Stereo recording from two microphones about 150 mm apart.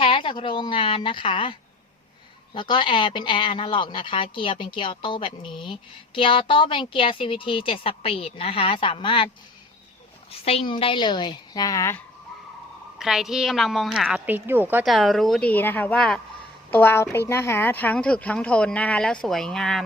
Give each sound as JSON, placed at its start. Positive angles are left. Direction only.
{"t": 0.0, "sound": "a sound", "side_deg": 35}
{"t": 2.5, "sound": "a woman's voice", "side_deg": 35}
{"t": 10.4, "sound": "a woman's voice", "side_deg": 40}
{"t": 13.0, "sound": "a woman's voice", "side_deg": 0}
{"t": 14.8, "sound": "a woman's voice", "side_deg": 0}
{"t": 16.7, "sound": "a woman's voice", "side_deg": 15}